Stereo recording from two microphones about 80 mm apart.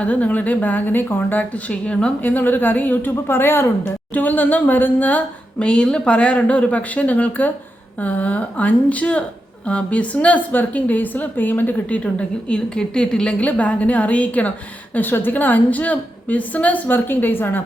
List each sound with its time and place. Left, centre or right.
0.0 s a woman's voice: centre